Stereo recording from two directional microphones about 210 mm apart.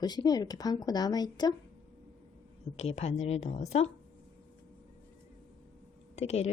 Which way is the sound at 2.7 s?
30° left (ahead or behind).